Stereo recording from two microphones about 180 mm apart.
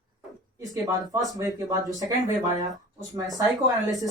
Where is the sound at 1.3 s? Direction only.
20° right (ahead or behind).